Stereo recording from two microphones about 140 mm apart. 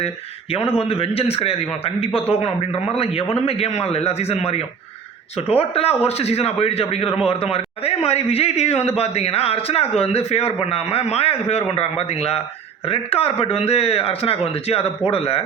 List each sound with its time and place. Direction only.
0.5 s a man's voice: 45° left (ahead or behind)